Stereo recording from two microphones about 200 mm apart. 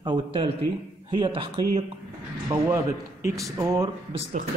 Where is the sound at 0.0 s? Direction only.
25° right (ahead or behind).